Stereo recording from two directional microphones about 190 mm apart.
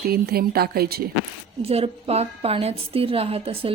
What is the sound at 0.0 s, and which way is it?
Speech, 55° right (ahead or behind).